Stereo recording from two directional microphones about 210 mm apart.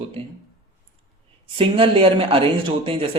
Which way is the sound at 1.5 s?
25° right (ahead or behind).